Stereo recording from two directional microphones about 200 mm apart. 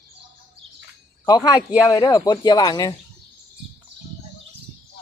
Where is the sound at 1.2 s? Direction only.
20° left (ahead or behind).